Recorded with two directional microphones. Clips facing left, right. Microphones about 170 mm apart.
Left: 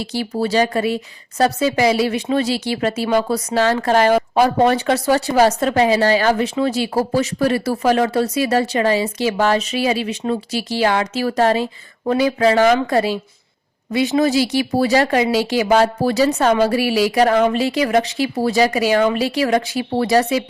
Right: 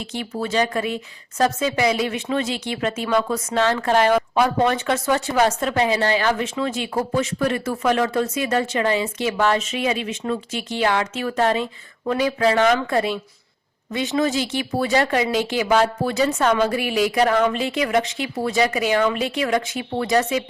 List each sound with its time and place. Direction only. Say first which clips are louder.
0.0 s a woman's voice: left 6 dB; 35° left (ahead or behind)
14.4 s a woman's voice: left 6 dB; 35° left (ahead or behind)